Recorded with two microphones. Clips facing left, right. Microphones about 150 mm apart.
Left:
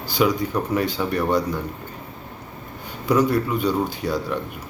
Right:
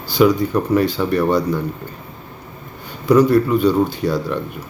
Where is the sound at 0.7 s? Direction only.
15° left (ahead or behind).